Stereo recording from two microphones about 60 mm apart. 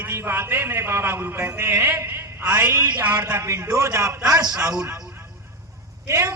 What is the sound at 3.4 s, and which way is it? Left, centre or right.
Speech, right.